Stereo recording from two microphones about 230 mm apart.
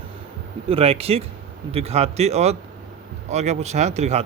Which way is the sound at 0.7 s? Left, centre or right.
Right.